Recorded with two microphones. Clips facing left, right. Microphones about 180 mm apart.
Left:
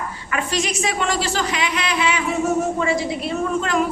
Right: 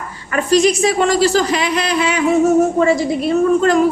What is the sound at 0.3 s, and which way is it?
A woman's voice, 40° right (ahead or behind).